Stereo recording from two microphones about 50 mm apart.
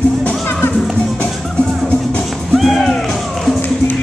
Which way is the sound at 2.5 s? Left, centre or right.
Centre.